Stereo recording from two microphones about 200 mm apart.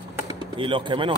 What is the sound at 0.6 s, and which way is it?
Speech, 25° right (ahead or behind).